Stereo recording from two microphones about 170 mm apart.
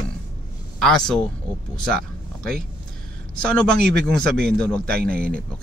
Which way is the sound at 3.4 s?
5° left (ahead or behind).